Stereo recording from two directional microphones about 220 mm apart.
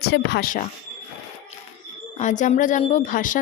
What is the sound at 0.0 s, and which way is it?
Speech, 45° left (ahead or behind).